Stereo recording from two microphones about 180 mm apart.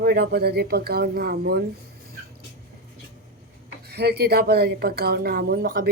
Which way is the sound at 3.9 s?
65° right (ahead or behind).